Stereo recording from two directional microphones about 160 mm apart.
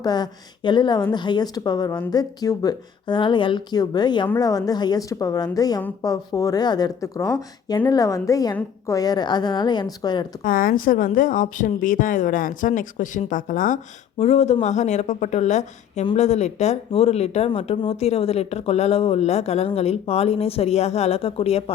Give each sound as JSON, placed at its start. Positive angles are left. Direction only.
{"t": 0.0, "sound": "speech", "side_deg": 25}
{"t": 10.4, "sound": "speech", "side_deg": 60}
{"t": 14.2, "sound": "speech", "side_deg": 40}